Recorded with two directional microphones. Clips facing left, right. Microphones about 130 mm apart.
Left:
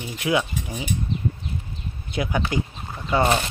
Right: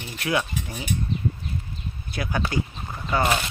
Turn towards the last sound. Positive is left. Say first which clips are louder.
# left 3 dB
turn(degrees=30)  # may be behind; listen again after turning